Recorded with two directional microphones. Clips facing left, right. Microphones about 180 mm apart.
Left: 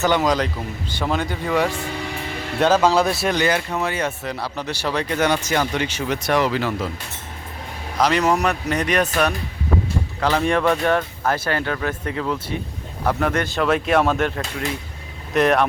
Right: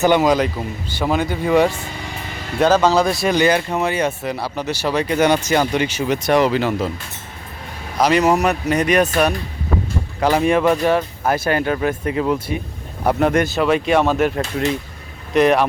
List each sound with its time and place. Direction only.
0.0 s speech: 10° right (ahead or behind)
2.6 s speech: centre (ahead or behind)
3.3 s speech: 20° right (ahead or behind)
7.9 s speech: 10° right (ahead or behind)
13.4 s speech: 5° right (ahead or behind)